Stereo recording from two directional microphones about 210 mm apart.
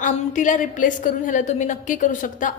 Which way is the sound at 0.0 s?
40° left (ahead or behind).